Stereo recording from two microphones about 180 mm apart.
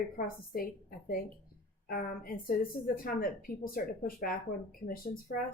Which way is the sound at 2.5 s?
55° left (ahead or behind).